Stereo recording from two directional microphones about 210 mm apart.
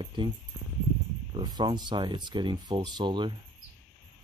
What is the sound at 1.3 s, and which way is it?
Speech, 20° right (ahead or behind).